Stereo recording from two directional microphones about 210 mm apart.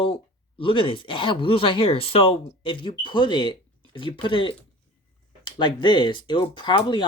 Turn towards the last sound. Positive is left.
turn(degrees=20)  # may be behind; listen again after turning